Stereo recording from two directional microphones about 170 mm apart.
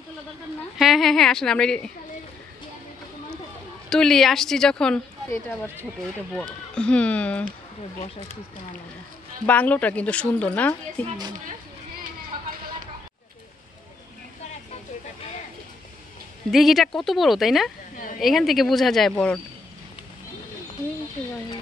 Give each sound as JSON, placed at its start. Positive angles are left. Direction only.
{"t": 0.7, "sound": "a woman's voice", "side_deg": 0}
{"t": 3.9, "sound": "a woman's voice", "side_deg": 5}
{"t": 9.5, "sound": "a woman's voice", "side_deg": 10}
{"t": 16.4, "sound": "a woman's voice", "side_deg": 0}
{"t": 17.9, "sound": "a woman's voice", "side_deg": 50}
{"t": 18.2, "sound": "a woman's voice", "side_deg": 0}